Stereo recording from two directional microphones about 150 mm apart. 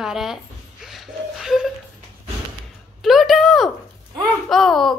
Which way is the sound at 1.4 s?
5° right (ahead or behind).